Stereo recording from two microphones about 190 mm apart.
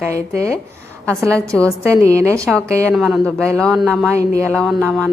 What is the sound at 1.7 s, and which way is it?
A woman's voice, 15° right (ahead or behind).